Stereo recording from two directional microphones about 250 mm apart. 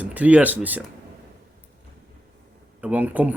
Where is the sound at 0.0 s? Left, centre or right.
Centre.